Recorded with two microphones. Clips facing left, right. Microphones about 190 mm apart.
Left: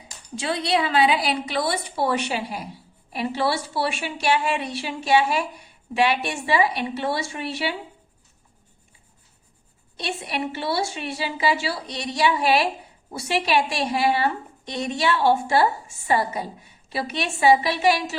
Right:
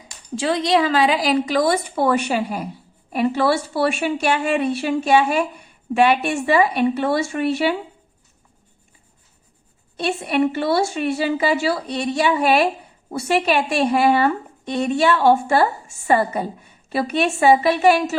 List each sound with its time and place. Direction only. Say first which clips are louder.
0.4 s a woman's voice: right 5 dB; 45° right (ahead or behind)
10.0 s a woman's voice: right 9 dB; 55° right (ahead or behind)